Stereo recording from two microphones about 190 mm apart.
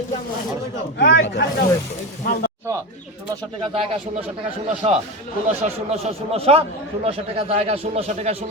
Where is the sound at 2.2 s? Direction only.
55° left (ahead or behind).